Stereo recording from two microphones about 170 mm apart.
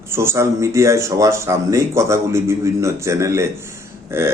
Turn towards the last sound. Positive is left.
turn(degrees=-15)  # may be behind; listen again after turning